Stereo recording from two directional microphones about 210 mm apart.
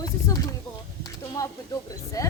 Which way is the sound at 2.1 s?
15° left (ahead or behind).